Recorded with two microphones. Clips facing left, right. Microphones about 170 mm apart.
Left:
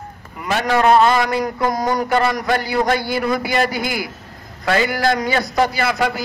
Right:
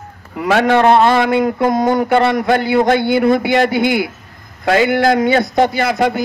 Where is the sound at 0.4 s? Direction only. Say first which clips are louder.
Right 7 dB; 80° right.